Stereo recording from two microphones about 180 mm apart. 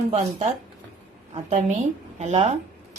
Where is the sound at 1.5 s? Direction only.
40° right (ahead or behind).